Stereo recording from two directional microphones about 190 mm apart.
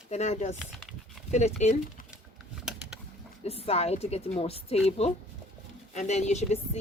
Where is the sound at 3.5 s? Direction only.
30° left (ahead or behind).